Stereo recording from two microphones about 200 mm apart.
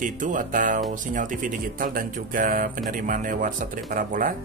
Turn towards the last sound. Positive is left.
turn(degrees=-45)  # may be behind; listen again after turning